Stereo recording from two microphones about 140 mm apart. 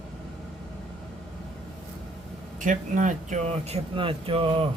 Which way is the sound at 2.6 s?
65° right (ahead or behind).